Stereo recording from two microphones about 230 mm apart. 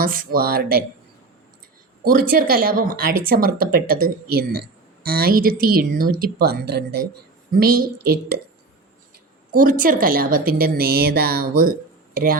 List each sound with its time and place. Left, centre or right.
0.0 s a woman's voice: right
2.0 s a woman's voice: right
9.5 s a woman's voice: right